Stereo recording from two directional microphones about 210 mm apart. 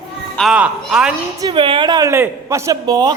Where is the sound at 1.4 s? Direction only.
20° right (ahead or behind).